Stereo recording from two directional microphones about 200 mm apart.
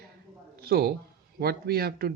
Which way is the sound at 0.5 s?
50° right (ahead or behind).